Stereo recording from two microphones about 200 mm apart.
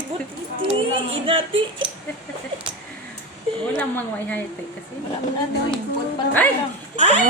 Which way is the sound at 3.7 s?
5° left (ahead or behind).